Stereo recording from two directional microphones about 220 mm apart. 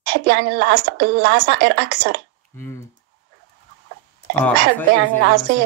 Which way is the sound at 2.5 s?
10° left (ahead or behind).